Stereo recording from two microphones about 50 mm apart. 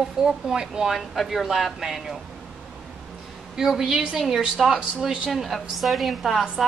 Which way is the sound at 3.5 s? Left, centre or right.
Centre.